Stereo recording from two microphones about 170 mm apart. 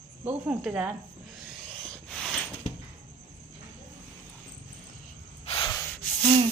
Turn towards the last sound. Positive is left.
turn(degrees=5)  # may be behind; listen again after turning